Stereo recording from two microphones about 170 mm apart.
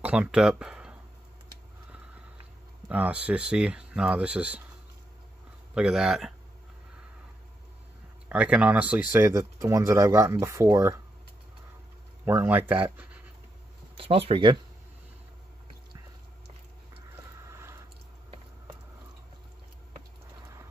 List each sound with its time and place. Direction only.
0.0 s speech: 10° right (ahead or behind)
2.9 s speech: 10° right (ahead or behind)
5.8 s speech: 5° right (ahead or behind)
8.3 s speech: 5° right (ahead or behind)
12.3 s speech: 10° right (ahead or behind)
13.9 s speech: 35° right (ahead or behind)
17.5 s a sound: 15° right (ahead or behind)